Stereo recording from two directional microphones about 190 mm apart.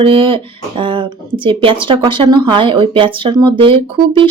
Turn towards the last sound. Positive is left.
turn(degrees=-25)  # may be behind; listen again after turning